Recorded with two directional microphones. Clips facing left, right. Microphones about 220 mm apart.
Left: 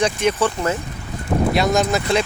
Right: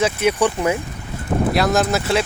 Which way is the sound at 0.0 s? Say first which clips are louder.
Right 1 dB; 10° right (ahead or behind).